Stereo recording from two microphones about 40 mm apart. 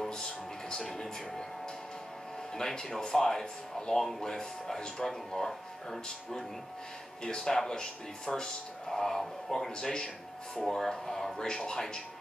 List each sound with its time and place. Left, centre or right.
0.1 s music: centre
2.5 s speech: centre